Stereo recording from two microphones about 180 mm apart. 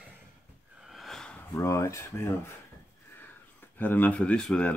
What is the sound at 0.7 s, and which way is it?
Snort, centre (ahead or behind).